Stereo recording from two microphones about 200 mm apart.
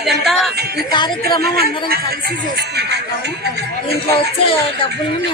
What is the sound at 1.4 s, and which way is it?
Speech, 50° right (ahead or behind).